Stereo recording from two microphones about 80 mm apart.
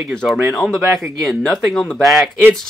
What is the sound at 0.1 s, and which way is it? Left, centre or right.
Speech, centre.